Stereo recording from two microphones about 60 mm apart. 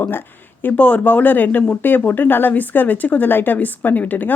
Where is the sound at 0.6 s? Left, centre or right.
Left.